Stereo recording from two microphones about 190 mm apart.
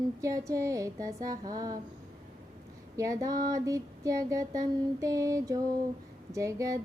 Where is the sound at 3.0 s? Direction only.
20° right (ahead or behind).